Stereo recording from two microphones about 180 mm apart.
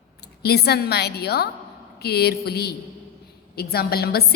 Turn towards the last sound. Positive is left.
turn(degrees=60)  # may be behind; listen again after turning